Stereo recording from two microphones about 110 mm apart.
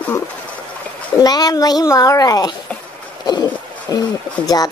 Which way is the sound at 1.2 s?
35° left (ahead or behind).